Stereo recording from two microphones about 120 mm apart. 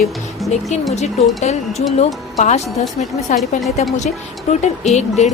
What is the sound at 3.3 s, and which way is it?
Music, 90° left.